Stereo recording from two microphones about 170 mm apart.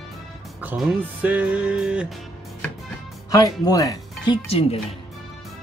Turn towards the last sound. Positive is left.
turn(degrees=35)  # may be behind; listen again after turning